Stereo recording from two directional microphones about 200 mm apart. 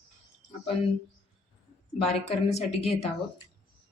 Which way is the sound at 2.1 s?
30° left (ahead or behind).